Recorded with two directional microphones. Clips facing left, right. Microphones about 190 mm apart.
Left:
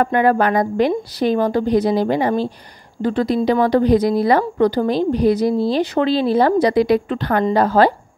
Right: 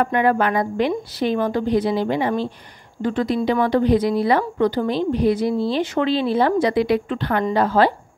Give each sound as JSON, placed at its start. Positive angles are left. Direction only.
{"t": 0.0, "sound": "a woman's voice", "side_deg": 40}